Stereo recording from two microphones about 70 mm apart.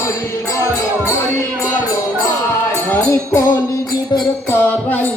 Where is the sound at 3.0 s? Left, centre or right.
Left.